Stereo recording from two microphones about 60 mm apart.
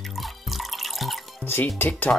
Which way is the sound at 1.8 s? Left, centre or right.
Left.